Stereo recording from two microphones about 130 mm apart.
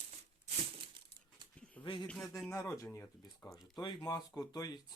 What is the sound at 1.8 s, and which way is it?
Speech, 35° left (ahead or behind).